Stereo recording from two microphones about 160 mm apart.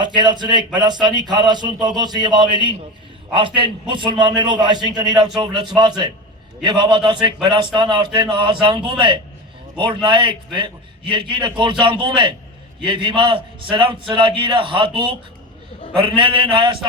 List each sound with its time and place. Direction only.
0.0 s a man's voice: 30° right (ahead or behind)